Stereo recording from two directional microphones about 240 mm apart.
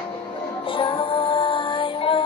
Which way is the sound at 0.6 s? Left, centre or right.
Left.